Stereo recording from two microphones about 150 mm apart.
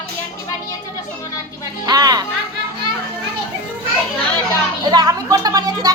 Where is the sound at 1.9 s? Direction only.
25° right (ahead or behind).